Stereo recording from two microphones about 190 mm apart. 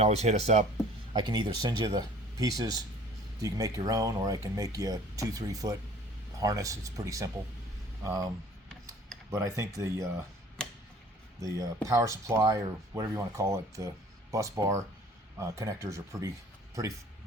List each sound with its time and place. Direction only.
0.0 s speech: 35° right (ahead or behind)
1.1 s speech: 25° right (ahead or behind)
9.3 s speech: 15° right (ahead or behind)
11.3 s speech: 15° right (ahead or behind)